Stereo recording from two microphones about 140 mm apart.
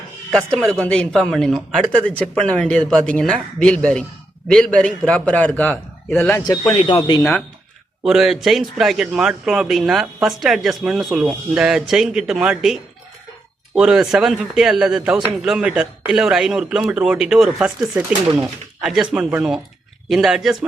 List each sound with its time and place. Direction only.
0.3 s a man's voice: 5° left (ahead or behind)
6.7 s speech: 40° left (ahead or behind)
8.0 s a man's voice: 5° right (ahead or behind)